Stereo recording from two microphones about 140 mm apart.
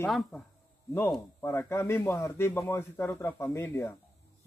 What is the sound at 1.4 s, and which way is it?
A man's voice, 15° left (ahead or behind).